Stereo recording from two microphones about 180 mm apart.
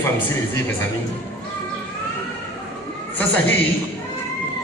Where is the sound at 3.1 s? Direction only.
10° left (ahead or behind).